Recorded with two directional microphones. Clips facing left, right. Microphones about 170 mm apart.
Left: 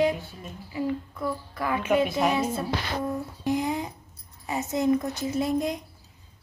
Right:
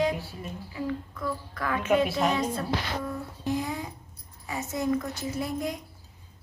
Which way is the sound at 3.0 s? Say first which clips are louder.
Left 4 dB; 20° left (ahead or behind).